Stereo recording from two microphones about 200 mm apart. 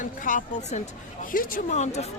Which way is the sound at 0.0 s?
40° left (ahead or behind).